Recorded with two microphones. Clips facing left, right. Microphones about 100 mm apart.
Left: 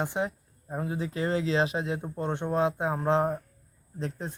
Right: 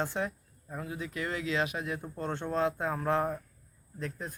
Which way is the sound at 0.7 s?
35° left (ahead or behind).